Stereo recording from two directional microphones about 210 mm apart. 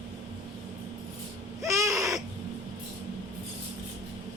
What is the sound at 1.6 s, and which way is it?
Baby cry, 15° right (ahead or behind).